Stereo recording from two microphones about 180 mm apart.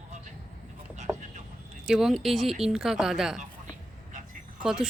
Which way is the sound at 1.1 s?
15° right (ahead or behind).